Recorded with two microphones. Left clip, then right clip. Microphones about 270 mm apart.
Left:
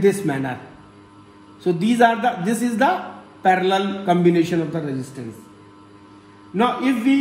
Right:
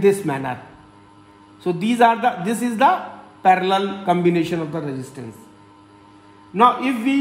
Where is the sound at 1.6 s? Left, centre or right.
Right.